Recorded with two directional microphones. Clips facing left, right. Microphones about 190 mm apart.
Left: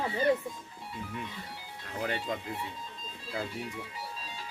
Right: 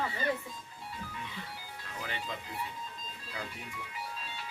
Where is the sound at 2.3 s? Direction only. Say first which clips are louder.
Left 6 dB; 50° left (ahead or behind).